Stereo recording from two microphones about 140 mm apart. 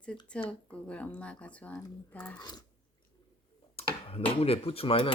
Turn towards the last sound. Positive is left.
turn(degrees=40)  # may be behind; listen again after turning